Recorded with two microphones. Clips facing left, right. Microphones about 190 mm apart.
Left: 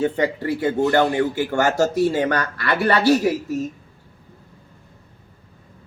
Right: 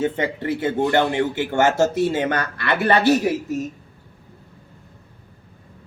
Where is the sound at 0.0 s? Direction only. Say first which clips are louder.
Left 2 dB; 20° right (ahead or behind).